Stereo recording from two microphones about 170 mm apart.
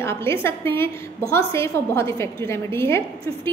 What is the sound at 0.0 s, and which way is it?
A woman's voice, 15° left (ahead or behind).